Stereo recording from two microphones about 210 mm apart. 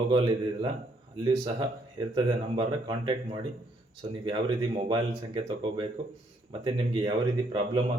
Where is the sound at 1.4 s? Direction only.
20° right (ahead or behind).